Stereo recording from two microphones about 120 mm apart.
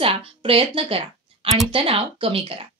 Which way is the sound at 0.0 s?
50° right (ahead or behind).